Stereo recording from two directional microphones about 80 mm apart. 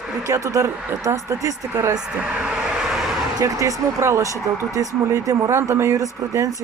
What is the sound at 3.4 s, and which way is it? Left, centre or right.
Speech, right.